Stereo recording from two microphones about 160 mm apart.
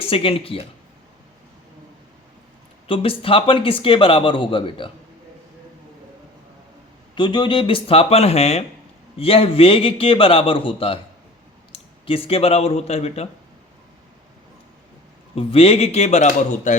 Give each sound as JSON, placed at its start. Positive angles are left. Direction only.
{"t": 0.0, "sound": "a man's voice", "side_deg": 35}
{"t": 2.8, "sound": "a man's voice", "side_deg": 35}
{"t": 7.2, "sound": "a man's voice", "side_deg": 30}
{"t": 12.0, "sound": "a man's voice", "side_deg": 35}
{"t": 15.4, "sound": "a man's voice", "side_deg": 35}